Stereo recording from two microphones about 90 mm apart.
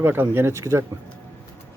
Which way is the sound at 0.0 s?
25° right (ahead or behind).